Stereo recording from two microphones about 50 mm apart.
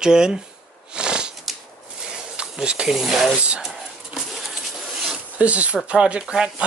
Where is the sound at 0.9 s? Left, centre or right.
Centre.